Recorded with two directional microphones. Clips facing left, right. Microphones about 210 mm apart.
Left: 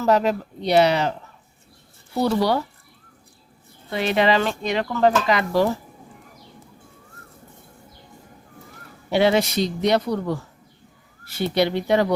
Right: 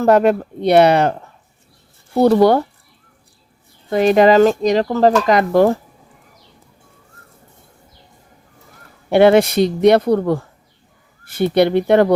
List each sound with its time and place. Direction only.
0.0 s speech: 55° right (ahead or behind)
3.8 s speech: 45° right (ahead or behind)
9.0 s speech: 55° right (ahead or behind)